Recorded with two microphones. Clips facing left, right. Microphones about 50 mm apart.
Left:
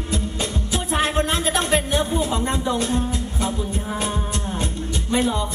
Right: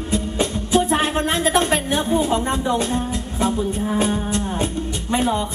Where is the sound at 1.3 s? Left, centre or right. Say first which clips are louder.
Right 3 dB; right.